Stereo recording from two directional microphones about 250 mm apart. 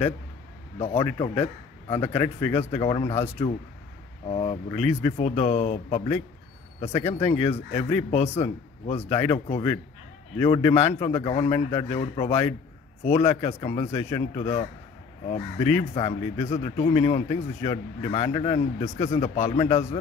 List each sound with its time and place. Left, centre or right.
0.7 s speech: left